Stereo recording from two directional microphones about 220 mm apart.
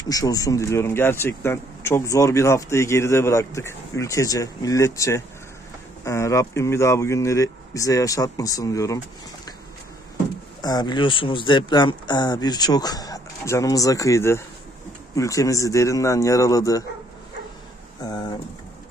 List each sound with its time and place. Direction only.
0.1 s speech: 15° left (ahead or behind)
10.6 s speech: 20° left (ahead or behind)